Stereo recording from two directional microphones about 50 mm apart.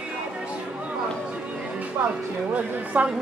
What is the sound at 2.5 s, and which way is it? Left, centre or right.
Speech, right.